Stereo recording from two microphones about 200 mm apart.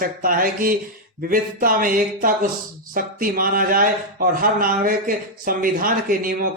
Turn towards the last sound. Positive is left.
turn(degrees=-45)  # may be behind; listen again after turning